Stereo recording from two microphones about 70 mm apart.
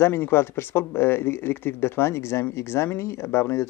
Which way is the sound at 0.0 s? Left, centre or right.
Left.